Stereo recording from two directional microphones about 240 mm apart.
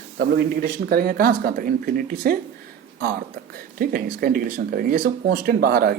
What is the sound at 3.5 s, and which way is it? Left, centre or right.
Speech, right.